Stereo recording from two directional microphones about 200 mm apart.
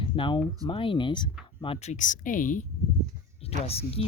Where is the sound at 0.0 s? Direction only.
25° left (ahead or behind); by 2.6 s 40° left (ahead or behind).